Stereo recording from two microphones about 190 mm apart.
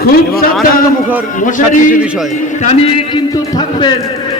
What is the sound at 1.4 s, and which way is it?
Speech, 45° left (ahead or behind).